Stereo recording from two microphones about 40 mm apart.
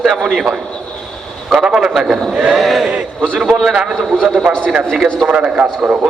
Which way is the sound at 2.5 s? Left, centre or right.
Centre.